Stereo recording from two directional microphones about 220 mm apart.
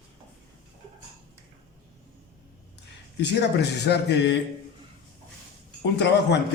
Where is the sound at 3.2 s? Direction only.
50° left (ahead or behind).